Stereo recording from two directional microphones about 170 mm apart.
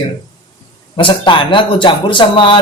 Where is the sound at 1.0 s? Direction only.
30° left (ahead or behind).